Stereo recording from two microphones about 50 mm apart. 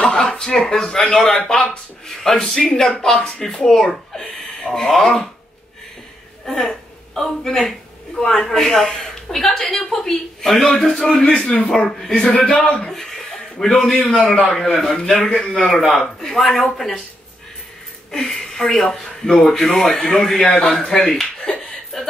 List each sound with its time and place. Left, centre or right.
0.0 s a sound: centre
1.5 s speech: centre
6.4 s a woman's voice: centre
12.0 s speech: centre
12.4 s a man's voice: centre
12.9 s a man's voice: centre
18.1 s speech: centre